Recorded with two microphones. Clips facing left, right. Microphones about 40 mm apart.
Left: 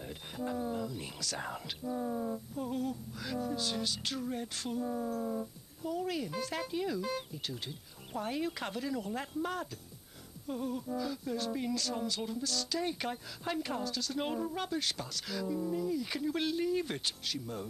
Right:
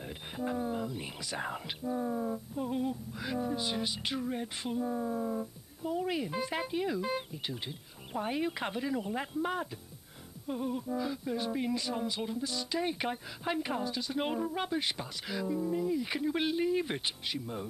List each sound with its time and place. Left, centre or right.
0.0 s speech: centre